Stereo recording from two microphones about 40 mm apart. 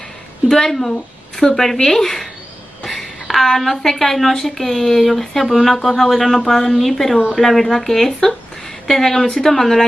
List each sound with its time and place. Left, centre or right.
0.5 s a woman's voice: centre